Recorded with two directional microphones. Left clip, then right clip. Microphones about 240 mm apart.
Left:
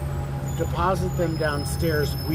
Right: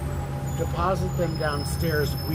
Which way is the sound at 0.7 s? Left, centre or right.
Left.